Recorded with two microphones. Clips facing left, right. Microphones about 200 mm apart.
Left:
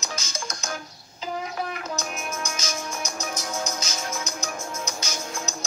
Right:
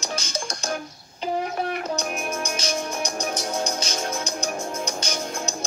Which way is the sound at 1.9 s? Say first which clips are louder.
Right 4 dB; 30° right (ahead or behind).